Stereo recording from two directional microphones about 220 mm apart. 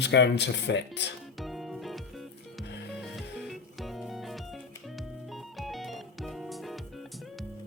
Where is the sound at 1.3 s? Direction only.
Centre (ahead or behind).